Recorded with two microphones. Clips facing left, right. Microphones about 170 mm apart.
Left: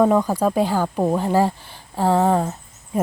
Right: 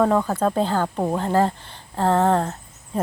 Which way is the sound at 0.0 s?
10° left (ahead or behind).